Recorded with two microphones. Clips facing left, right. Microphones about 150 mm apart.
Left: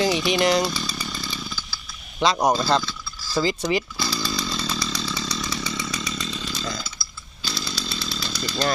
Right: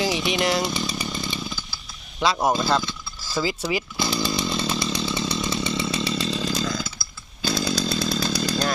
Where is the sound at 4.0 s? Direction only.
20° right (ahead or behind).